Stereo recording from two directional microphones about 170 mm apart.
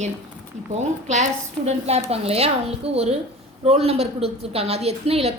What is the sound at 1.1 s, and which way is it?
A woman's voice, 40° right (ahead or behind).